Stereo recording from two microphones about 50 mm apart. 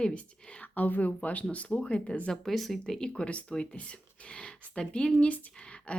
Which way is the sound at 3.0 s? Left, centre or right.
Centre.